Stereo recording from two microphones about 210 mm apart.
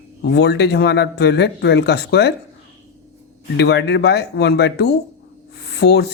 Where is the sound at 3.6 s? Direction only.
55° left (ahead or behind).